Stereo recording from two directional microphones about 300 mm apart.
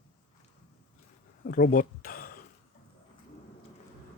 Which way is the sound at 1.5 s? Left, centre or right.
Left.